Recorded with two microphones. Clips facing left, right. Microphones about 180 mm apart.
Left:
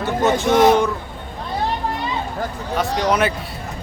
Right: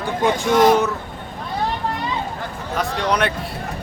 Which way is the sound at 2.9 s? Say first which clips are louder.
Left 4 dB; 40° left (ahead or behind).